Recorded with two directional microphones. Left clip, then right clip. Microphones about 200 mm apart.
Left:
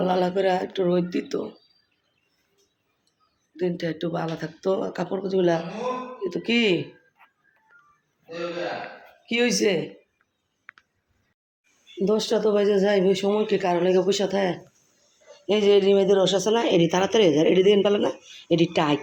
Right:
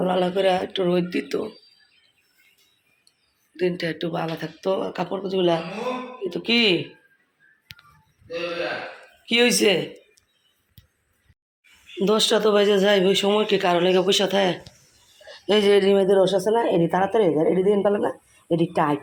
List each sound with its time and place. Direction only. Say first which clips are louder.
0.0 s a man's voice: right 1 dB; 5° left (ahead or behind)
3.6 s a man's voice: right 2 dB; 5° left (ahead or behind)
9.2 s speech: right 4 dB; centre (ahead or behind)
12.0 s a man's voice: right 3 dB; centre (ahead or behind)